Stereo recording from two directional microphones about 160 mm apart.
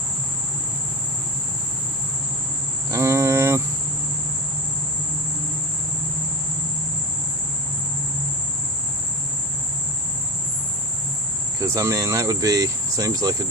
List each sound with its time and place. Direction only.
2.9 s cricket: 15° right (ahead or behind)
11.6 s speech: 20° right (ahead or behind)